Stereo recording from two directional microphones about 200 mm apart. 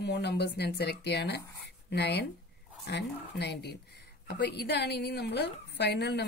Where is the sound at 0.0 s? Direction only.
60° left (ahead or behind).